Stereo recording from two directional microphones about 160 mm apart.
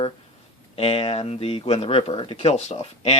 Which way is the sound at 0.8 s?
35° left (ahead or behind).